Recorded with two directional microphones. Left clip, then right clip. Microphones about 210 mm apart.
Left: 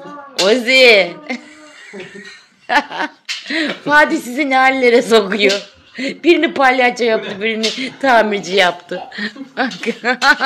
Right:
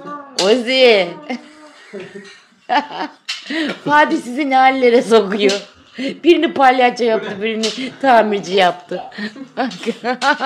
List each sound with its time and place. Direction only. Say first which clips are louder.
0.4 s a woman's voice: left 2 dB; 10° right (ahead or behind)
2.7 s a woman's voice: left 2 dB; 5° right (ahead or behind)